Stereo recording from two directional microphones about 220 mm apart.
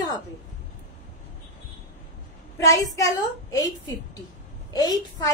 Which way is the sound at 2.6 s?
15° left (ahead or behind).